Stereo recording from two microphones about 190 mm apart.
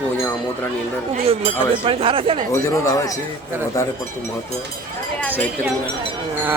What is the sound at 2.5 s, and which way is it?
Speech, 15° left (ahead or behind).